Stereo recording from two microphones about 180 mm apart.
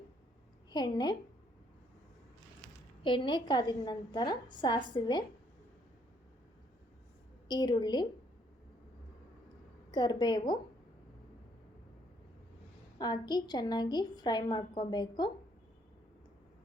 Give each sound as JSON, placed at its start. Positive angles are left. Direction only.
{"t": 0.7, "sound": "a woman's voice", "side_deg": 25}
{"t": 3.0, "sound": "a woman's voice", "side_deg": 25}
{"t": 7.4, "sound": "a woman's voice", "side_deg": 25}
{"t": 9.9, "sound": "a woman's voice", "side_deg": 25}
{"t": 13.0, "sound": "a woman's voice", "side_deg": 25}